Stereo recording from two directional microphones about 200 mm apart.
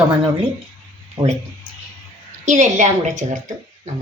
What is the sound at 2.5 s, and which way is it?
Speech, 35° right (ahead or behind).